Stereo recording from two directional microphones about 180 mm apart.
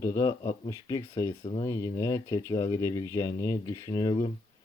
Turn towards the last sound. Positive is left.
turn(degrees=20)  # may be behind; listen again after turning